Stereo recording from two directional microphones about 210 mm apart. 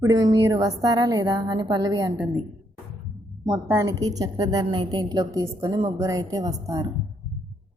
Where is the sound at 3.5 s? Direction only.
10° right (ahead or behind).